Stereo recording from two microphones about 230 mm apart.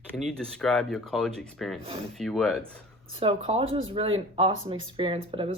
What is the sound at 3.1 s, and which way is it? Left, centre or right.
Speech, right.